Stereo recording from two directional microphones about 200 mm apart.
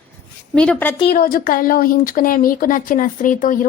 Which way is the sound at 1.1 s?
45° left (ahead or behind).